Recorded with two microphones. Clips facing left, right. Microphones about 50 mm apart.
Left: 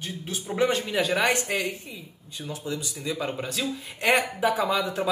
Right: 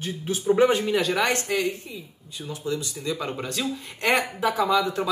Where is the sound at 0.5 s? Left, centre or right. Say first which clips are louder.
Right 5 dB; centre.